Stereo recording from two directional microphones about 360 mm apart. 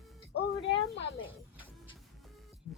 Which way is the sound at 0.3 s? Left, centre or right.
Left.